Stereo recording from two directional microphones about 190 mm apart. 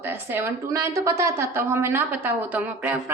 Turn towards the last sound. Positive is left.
turn(degrees=-5)  # may be behind; listen again after turning